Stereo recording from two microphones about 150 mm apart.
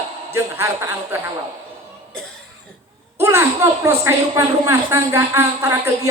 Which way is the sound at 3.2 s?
15° right (ahead or behind).